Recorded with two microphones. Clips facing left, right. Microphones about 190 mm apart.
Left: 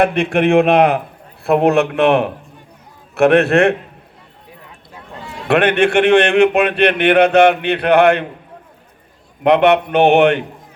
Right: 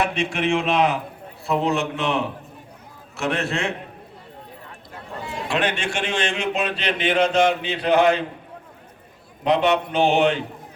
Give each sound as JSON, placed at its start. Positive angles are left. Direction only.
{"t": 0.0, "sound": "a man's voice", "side_deg": 55}
{"t": 5.5, "sound": "a man's voice", "side_deg": 60}
{"t": 9.4, "sound": "a man's voice", "side_deg": 60}